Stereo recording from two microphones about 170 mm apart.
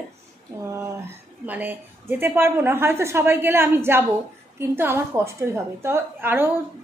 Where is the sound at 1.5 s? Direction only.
10° right (ahead or behind).